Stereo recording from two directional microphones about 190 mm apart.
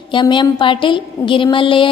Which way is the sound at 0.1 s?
25° left (ahead or behind).